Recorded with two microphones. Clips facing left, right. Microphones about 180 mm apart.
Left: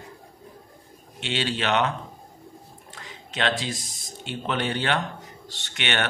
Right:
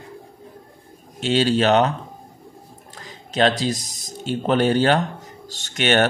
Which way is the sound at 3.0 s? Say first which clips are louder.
Right 9 dB; 40° right (ahead or behind).